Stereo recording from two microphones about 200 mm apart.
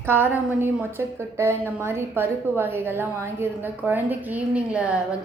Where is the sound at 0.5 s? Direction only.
10° right (ahead or behind).